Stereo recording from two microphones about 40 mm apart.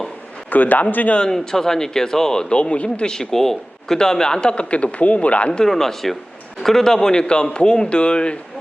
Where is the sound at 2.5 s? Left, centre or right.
Left.